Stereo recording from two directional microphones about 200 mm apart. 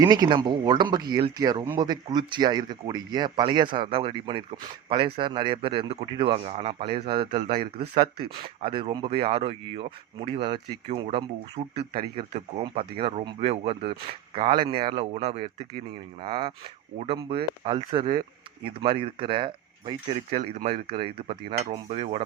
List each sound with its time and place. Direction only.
0.0 s speech: 20° right (ahead or behind)
7.4 s speech: 50° right (ahead or behind)
8.4 s speech: 25° right (ahead or behind)